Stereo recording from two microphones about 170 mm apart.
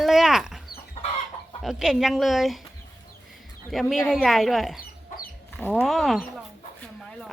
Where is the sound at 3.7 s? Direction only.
Centre (ahead or behind).